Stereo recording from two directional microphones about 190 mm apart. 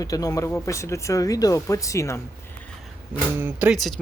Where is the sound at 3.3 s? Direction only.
10° right (ahead or behind).